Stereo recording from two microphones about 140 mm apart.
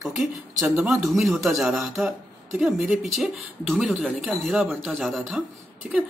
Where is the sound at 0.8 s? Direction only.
Centre (ahead or behind).